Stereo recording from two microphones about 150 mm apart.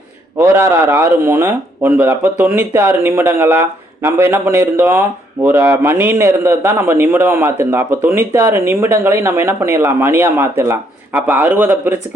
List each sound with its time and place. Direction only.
0.3 s speech: 15° right (ahead or behind)